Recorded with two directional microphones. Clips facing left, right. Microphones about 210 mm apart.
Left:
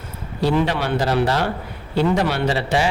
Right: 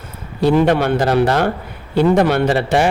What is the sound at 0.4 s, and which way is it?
Speech, 55° right (ahead or behind).